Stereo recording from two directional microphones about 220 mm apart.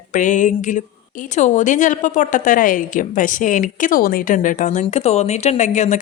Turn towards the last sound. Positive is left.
turn(degrees=30)  # may be behind; listen again after turning